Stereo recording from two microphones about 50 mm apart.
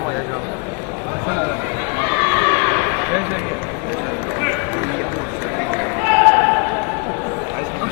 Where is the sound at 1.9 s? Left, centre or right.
Right.